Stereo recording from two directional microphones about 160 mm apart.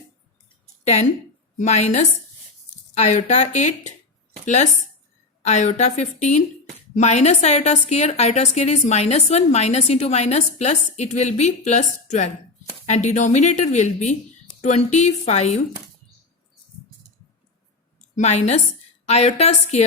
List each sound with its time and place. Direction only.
1.5 s a woman's voice: 45° left (ahead or behind)
18.2 s a woman's voice: 45° left (ahead or behind)